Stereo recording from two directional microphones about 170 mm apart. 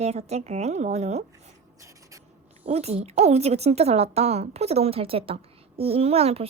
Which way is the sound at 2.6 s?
40° right (ahead or behind).